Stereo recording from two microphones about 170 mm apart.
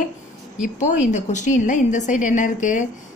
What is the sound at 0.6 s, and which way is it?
Speech, 45° left (ahead or behind).